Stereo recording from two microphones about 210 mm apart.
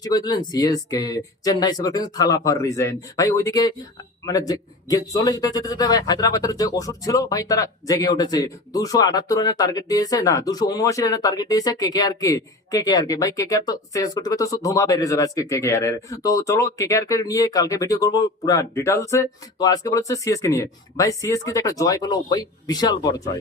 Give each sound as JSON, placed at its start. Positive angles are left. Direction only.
{"t": 0.0, "sound": "a man's voice", "side_deg": 20}